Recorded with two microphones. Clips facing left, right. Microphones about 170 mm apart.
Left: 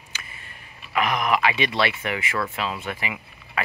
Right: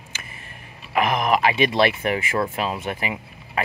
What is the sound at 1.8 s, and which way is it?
Speech, 40° right (ahead or behind).